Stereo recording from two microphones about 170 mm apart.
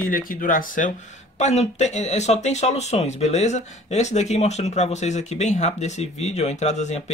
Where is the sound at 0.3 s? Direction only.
55° left (ahead or behind).